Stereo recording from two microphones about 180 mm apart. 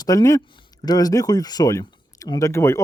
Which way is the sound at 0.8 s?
20° left (ahead or behind).